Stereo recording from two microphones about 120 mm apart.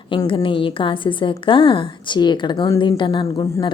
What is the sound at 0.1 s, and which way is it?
A woman's voice, 45° left (ahead or behind).